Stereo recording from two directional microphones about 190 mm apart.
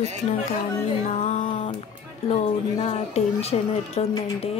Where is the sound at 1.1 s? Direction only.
35° left (ahead or behind).